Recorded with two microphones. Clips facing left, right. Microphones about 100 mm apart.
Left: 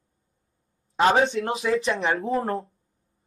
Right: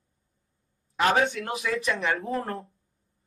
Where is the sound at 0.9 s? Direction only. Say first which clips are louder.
Left 4 dB; 25° left (ahead or behind).